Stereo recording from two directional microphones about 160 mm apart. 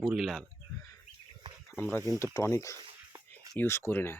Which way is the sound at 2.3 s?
20° left (ahead or behind).